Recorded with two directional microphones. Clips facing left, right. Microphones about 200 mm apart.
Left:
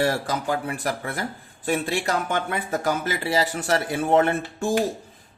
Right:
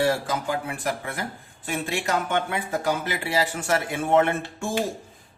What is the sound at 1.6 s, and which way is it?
Speech, 40° left (ahead or behind).